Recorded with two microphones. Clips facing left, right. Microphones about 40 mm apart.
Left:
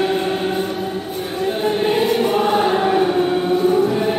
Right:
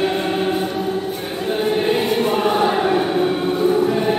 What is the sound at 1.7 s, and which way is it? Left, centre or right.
Choir, centre.